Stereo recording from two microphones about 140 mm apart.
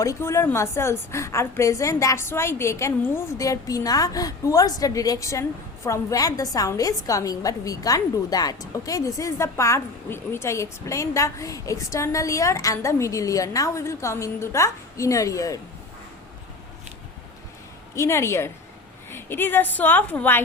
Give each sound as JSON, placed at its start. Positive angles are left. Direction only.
{"t": 0.0, "sound": "a woman's voice", "side_deg": 20}
{"t": 17.9, "sound": "a woman's voice", "side_deg": 20}